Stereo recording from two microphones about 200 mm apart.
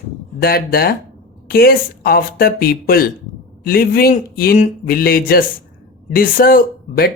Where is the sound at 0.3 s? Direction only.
50° left (ahead or behind).